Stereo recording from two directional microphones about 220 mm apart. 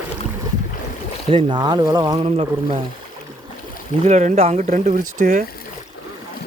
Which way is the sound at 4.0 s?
30° right (ahead or behind).